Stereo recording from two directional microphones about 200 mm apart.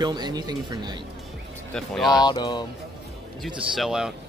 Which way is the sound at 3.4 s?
Centre (ahead or behind).